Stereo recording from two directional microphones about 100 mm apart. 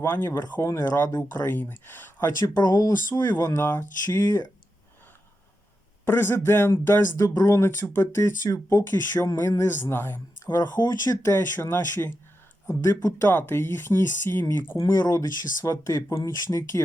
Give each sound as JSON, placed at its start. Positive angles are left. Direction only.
{"t": 0.0, "sound": "speech", "side_deg": 25}
{"t": 0.3, "sound": "speech", "side_deg": 40}
{"t": 2.4, "sound": "speech", "side_deg": 40}
{"t": 3.6, "sound": "speech", "side_deg": 20}
{"t": 4.0, "sound": "speech", "side_deg": 35}
{"t": 6.1, "sound": "speech", "side_deg": 20}
{"t": 14.8, "sound": "speech", "side_deg": 40}